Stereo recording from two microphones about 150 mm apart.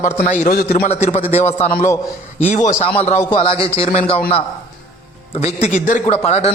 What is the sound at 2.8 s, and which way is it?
A man's voice, 45° left (ahead or behind).